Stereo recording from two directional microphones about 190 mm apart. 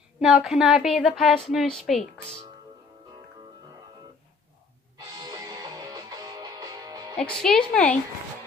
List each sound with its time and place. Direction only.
0.2 s a woman's voice: centre (ahead or behind)
4.9 s music: 20° right (ahead or behind)
7.2 s a woman's voice: 5° left (ahead or behind)